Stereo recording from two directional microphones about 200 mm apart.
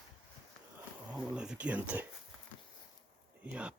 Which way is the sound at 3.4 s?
5° right (ahead or behind).